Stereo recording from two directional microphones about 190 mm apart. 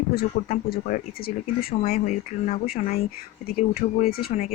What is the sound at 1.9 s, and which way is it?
Speech, 40° left (ahead or behind).